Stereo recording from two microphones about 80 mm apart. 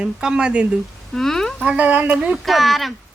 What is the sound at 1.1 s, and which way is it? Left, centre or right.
Speech, centre.